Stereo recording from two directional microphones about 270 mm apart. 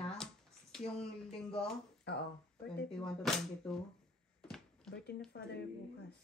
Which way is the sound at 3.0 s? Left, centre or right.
Centre.